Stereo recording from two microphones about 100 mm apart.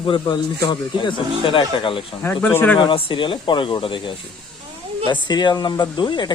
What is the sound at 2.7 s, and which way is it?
Speech, 55° left (ahead or behind).